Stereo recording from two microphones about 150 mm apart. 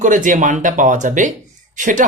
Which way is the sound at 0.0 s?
60° right (ahead or behind).